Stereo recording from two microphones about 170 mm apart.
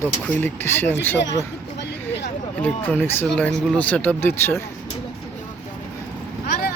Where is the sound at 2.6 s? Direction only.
10° left (ahead or behind).